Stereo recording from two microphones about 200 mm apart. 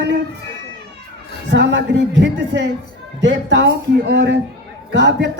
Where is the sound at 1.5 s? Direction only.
65° right (ahead or behind).